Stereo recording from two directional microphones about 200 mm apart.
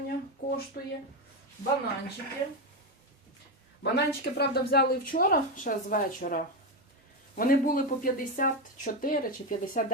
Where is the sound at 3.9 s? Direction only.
55° left (ahead or behind).